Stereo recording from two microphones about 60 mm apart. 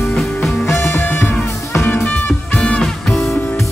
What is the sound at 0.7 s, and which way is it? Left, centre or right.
Music, left.